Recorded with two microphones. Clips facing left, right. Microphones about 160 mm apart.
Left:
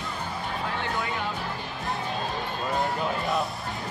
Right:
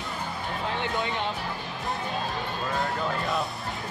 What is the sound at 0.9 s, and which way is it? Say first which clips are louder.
Speech: right 1 dB; 20° right (ahead or behind).